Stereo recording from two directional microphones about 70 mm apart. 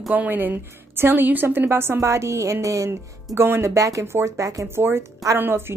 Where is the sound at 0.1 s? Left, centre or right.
Right.